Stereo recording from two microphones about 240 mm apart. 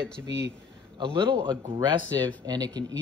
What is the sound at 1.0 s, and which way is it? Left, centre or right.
A man's voice, centre.